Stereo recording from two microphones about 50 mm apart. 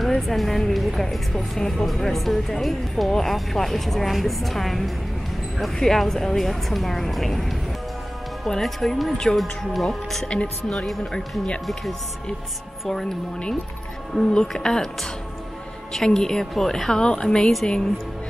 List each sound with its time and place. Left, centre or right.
0.0 s a woman's voice: centre
9.1 s a woman's voice: centre
9.4 s a woman's voice: centre
10.2 s speech: left
10.9 s a woman's voice: centre
14.2 s a woman's voice: centre
15.9 s a woman's voice: centre